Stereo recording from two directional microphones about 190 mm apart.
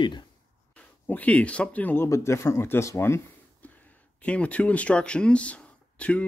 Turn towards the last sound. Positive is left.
turn(degrees=5)  # may be behind; listen again after turning